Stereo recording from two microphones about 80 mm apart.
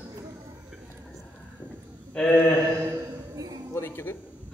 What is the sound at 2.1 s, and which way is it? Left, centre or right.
Speech, centre.